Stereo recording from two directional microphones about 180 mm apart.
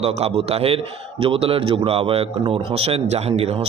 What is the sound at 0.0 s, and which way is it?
Speech, 35° right (ahead or behind).